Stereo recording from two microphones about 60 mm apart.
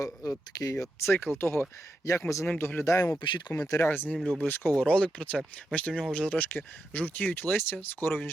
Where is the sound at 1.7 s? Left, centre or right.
Left.